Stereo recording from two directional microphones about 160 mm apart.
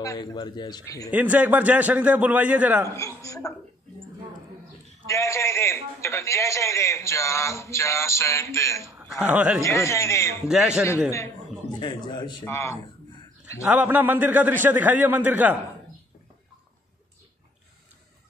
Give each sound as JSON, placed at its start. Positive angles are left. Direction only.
{"t": 0.0, "sound": "a man's voice", "side_deg": 25}
{"t": 1.1, "sound": "a man's voice", "side_deg": -10}
{"t": 3.0, "sound": "a man's voice", "side_deg": 20}
{"t": 5.0, "sound": "a man's voice", "side_deg": 20}
{"t": 9.2, "sound": "a man's voice", "side_deg": -10}
{"t": 9.6, "sound": "a man's voice", "side_deg": 20}
{"t": 11.8, "sound": "a man's voice", "side_deg": 30}
{"t": 12.4, "sound": "a man's voice", "side_deg": 15}
{"t": 13.7, "sound": "a man's voice", "side_deg": -10}